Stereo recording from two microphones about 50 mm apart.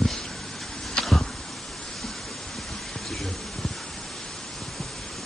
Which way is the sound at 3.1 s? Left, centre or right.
Centre.